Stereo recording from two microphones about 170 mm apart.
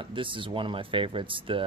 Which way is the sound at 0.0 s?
30° right (ahead or behind).